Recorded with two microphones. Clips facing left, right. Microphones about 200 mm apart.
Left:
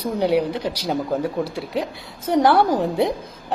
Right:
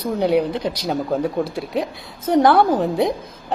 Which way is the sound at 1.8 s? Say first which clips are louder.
Right 2 dB; 10° right (ahead or behind).